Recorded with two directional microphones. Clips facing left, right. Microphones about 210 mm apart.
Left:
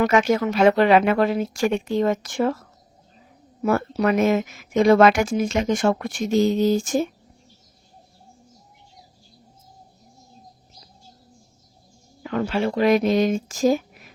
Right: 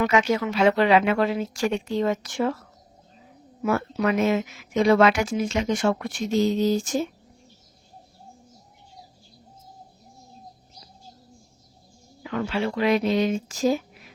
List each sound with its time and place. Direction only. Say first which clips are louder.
0.0 s speech: left 3 dB; 50° left (ahead or behind)
3.6 s speech: left 3 dB; 40° left (ahead or behind)
12.2 s speech: left 3 dB; 40° left (ahead or behind)